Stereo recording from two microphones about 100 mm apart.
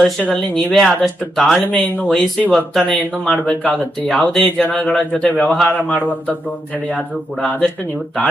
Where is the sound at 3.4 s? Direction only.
15° left (ahead or behind).